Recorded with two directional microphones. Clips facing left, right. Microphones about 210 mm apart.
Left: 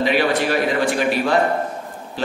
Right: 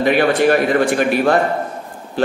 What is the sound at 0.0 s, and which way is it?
A man's voice, 55° right (ahead or behind).